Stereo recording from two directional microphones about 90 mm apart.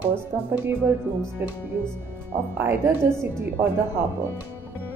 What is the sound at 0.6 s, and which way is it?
Speech, 20° right (ahead or behind).